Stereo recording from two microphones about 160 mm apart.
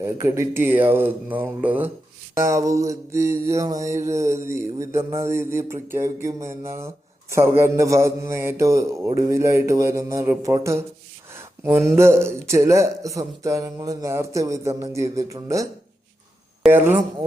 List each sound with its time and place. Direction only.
0.0 s mantra: 20° right (ahead or behind)
12.5 s a man's voice: 20° right (ahead or behind)
16.7 s mantra: 15° right (ahead or behind)